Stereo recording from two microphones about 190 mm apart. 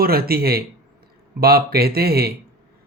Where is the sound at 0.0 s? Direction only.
55° right (ahead or behind).